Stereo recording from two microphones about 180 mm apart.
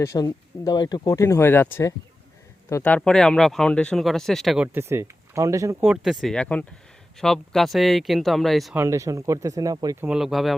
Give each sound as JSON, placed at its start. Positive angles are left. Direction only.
{"t": 0.0, "sound": "speech", "side_deg": 20}
{"t": 8.7, "sound": "speech", "side_deg": -15}
{"t": 10.1, "sound": "speech", "side_deg": 0}